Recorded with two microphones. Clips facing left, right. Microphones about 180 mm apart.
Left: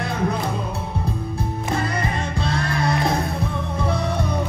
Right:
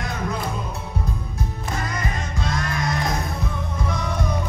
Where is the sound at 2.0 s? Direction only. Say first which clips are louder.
Left 4 dB; 30° left (ahead or behind).